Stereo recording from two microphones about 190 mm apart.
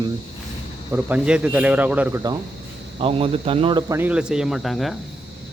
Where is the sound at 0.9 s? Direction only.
10° right (ahead or behind).